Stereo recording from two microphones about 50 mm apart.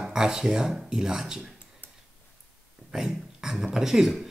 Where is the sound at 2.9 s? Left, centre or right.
Centre.